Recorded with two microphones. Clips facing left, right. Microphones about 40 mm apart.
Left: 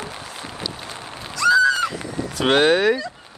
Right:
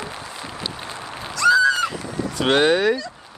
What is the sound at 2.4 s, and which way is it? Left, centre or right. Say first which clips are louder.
Speech: left 1 dB; centre.